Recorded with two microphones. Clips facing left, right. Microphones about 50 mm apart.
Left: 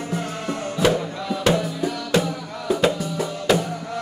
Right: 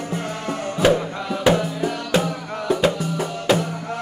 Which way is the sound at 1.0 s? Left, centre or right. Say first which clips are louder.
Right 1 dB; right.